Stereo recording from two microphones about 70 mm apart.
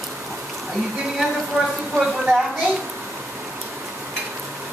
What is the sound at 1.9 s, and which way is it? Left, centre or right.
Speech, centre.